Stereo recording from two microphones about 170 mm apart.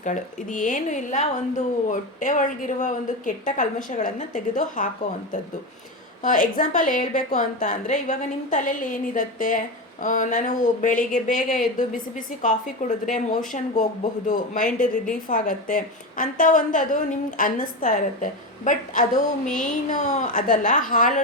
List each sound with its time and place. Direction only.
0.0 s a woman's voice: 50° left (ahead or behind)
6.2 s a woman's voice: 50° left (ahead or behind)